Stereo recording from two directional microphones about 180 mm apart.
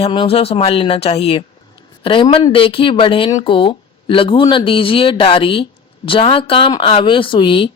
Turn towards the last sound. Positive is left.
turn(degrees=30)  # may be behind; listen again after turning